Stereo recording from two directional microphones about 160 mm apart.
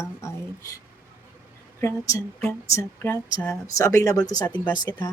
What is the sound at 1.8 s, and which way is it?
Speech, 20° left (ahead or behind).